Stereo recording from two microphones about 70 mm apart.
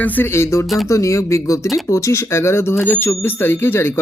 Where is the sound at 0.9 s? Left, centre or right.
Left.